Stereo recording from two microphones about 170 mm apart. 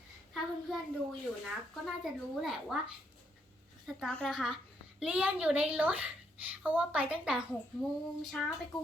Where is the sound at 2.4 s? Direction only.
Centre (ahead or behind).